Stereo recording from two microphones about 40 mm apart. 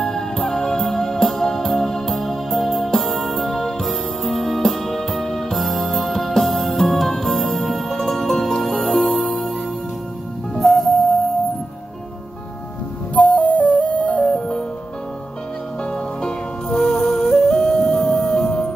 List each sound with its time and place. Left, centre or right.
0.0 s music: centre
13.1 s music: left
15.8 s music: centre